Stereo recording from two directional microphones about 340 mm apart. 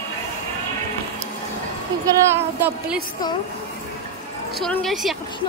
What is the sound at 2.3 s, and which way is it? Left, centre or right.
Speech, centre.